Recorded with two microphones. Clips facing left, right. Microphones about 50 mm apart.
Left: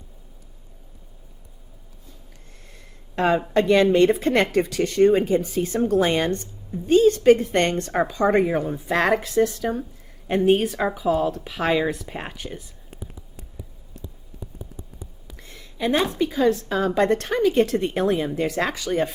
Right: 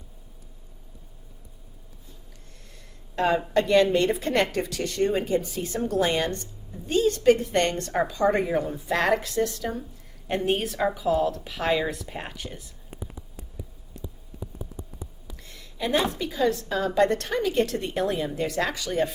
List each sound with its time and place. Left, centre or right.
3.2 s a woman's voice: left
15.4 s a woman's voice: left